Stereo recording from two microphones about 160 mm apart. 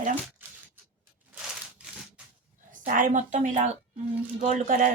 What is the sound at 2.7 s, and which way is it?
A woman's voice, 55° right (ahead or behind).